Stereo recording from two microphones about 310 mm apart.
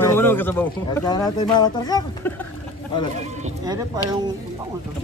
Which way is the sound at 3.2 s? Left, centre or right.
Centre.